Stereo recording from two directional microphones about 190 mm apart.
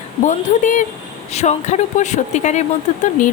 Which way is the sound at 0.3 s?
40° left (ahead or behind).